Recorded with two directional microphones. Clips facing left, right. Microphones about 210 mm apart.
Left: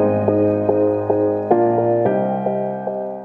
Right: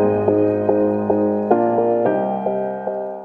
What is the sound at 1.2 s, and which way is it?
Music, 10° left (ahead or behind).